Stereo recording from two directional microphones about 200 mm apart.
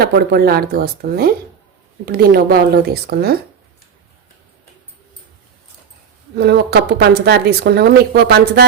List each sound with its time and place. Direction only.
0.0 s a woman's voice: 50° right (ahead or behind)
6.3 s a woman's voice: 55° right (ahead or behind)